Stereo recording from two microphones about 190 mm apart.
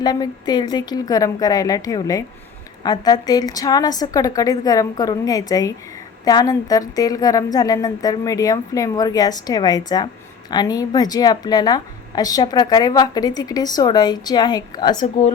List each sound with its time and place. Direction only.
0.0 s a woman's voice: 20° left (ahead or behind)